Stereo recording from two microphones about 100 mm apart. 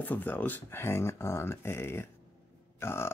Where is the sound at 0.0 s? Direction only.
15° left (ahead or behind).